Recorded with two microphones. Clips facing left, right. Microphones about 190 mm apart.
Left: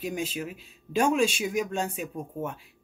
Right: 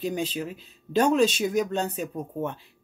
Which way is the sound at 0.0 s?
10° left (ahead or behind).